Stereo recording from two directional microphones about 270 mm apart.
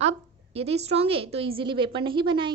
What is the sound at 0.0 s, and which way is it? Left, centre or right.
A woman's voice, right.